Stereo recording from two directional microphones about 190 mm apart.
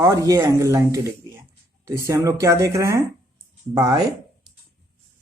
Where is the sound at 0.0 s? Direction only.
15° right (ahead or behind).